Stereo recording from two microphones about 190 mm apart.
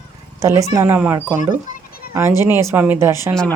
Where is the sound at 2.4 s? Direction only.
10° right (ahead or behind).